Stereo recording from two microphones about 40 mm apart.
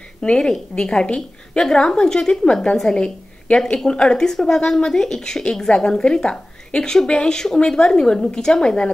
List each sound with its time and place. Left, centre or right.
0.2 s a woman's voice: centre